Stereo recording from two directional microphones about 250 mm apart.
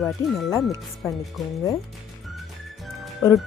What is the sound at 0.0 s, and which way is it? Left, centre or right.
Speech, centre.